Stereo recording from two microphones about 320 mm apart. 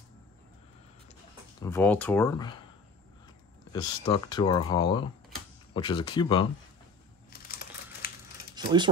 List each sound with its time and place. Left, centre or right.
1.6 s speech: centre
3.7 s speech: centre
7.2 s crumpling: left
8.5 s speech: centre